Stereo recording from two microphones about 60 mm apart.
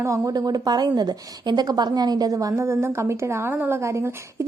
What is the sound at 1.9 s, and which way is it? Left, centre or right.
Speech, right.